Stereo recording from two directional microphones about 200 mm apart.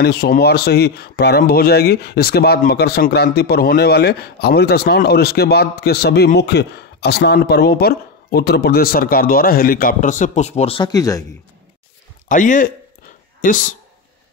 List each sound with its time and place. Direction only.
0.0 s speech: 50° left (ahead or behind); by 10.9 s 30° left (ahead or behind)
10.9 s speech: 15° left (ahead or behind)
12.3 s a man's voice: 40° left (ahead or behind)